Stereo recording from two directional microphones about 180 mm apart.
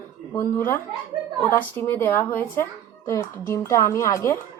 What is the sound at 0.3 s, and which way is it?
A woman's voice, 15° left (ahead or behind).